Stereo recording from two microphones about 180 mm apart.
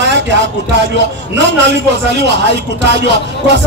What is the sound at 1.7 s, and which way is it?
A man's voice, 70° right (ahead or behind).